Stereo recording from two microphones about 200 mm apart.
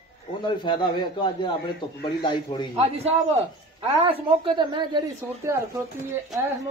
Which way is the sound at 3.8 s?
30° right (ahead or behind).